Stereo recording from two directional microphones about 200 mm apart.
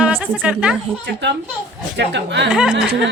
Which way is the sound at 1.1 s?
60° right (ahead or behind).